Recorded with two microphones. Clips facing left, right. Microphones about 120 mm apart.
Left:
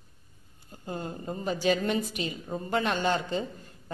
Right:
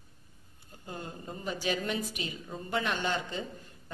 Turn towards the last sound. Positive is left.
turn(degrees=35)  # may be behind; listen again after turning